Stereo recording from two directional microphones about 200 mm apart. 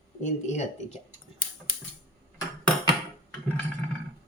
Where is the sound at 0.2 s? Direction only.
35° left (ahead or behind).